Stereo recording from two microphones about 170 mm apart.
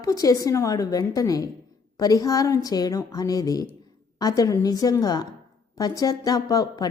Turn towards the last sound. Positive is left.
turn(degrees=20)  # may be behind; listen again after turning